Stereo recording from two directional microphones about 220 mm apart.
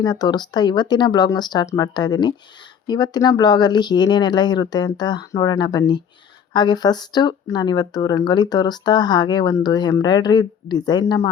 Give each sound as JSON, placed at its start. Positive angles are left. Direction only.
{"t": 0.0, "sound": "speech", "side_deg": 20}